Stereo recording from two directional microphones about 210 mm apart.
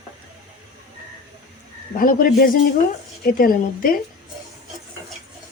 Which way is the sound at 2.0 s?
40° left (ahead or behind).